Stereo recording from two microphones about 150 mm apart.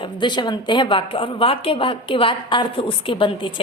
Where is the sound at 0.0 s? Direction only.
30° left (ahead or behind).